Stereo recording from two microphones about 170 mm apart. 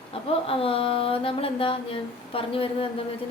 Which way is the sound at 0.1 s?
35° left (ahead or behind).